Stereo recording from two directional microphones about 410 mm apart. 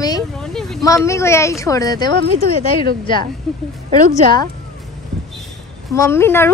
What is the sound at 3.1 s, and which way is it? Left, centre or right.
Speech, centre.